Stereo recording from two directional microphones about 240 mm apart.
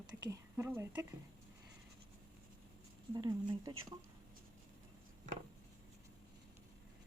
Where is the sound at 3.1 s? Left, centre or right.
Centre.